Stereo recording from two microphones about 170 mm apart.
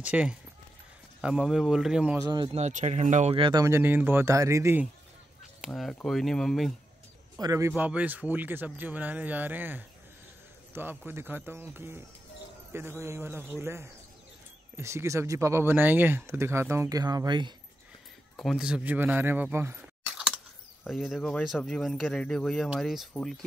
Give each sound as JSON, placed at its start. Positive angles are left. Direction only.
{"t": 0.0, "sound": "speech", "side_deg": -5}
{"t": 2.1, "sound": "speech", "side_deg": -25}
{"t": 2.5, "sound": "speech", "side_deg": -40}
{"t": 3.3, "sound": "speech", "side_deg": -25}
{"t": 5.6, "sound": "speech", "side_deg": 0}
{"t": 7.3, "sound": "speech", "side_deg": -20}
{"t": 13.0, "sound": "speech", "side_deg": -15}
{"t": 18.3, "sound": "speech", "side_deg": 0}
{"t": 20.1, "sound": "a sound", "side_deg": -5}
{"t": 20.8, "sound": "speech", "side_deg": 0}